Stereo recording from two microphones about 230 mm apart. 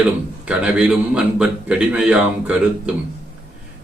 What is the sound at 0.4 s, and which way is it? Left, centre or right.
A man's voice, centre.